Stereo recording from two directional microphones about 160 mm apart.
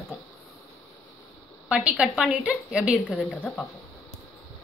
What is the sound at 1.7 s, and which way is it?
A woman's voice, 5° right (ahead or behind).